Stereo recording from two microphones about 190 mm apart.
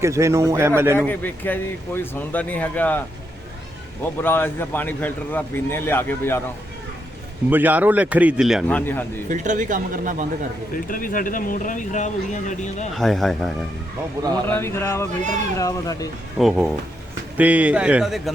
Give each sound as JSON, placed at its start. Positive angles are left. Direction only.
{"t": 0.0, "sound": "speech", "side_deg": -15}
{"t": 0.9, "sound": "a man's voice", "side_deg": 10}
{"t": 4.2, "sound": "a man's voice", "side_deg": 10}
{"t": 7.5, "sound": "speech", "side_deg": -10}
{"t": 8.6, "sound": "a man's voice", "side_deg": 10}
{"t": 9.3, "sound": "speech", "side_deg": -40}
{"t": 10.8, "sound": "speech", "side_deg": 45}
{"t": 13.0, "sound": "speech", "side_deg": 0}
{"t": 14.2, "sound": "a man's voice", "side_deg": -20}
{"t": 14.4, "sound": "a man's voice", "side_deg": 10}
{"t": 16.4, "sound": "speech", "side_deg": -5}